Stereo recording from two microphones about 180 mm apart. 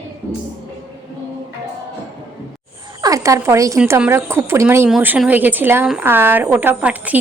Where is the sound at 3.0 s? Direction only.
20° right (ahead or behind).